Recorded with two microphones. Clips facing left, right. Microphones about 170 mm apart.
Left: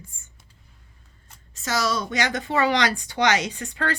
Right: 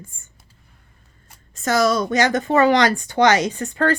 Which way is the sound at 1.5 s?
50° right (ahead or behind).